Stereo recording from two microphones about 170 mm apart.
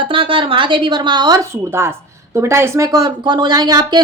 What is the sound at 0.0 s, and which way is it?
Speech, 30° right (ahead or behind).